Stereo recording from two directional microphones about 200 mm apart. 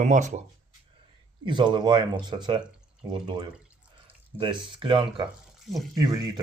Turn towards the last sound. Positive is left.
turn(degrees=-20)  # may be behind; listen again after turning